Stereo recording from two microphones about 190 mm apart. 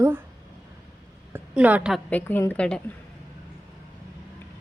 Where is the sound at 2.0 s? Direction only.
10° left (ahead or behind).